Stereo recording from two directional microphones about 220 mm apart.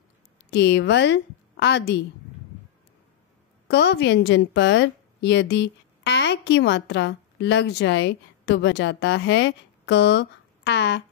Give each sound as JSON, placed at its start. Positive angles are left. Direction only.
{"t": 0.5, "sound": "a woman's voice", "side_deg": 50}
{"t": 3.6, "sound": "a woman's voice", "side_deg": 50}